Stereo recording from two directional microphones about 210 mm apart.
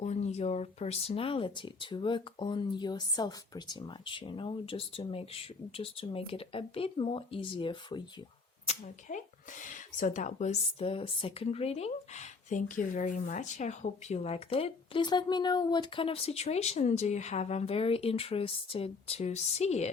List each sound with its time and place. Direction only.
0.0 s speech: 30° left (ahead or behind)
8.6 s speech: 35° left (ahead or behind)